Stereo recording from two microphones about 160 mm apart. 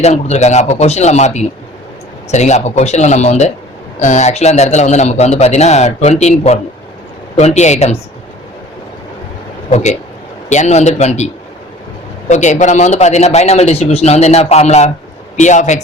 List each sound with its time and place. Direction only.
0.0 s speech: 45° left (ahead or behind)
9.6 s a man's voice: 45° left (ahead or behind)
12.3 s speech: 50° left (ahead or behind)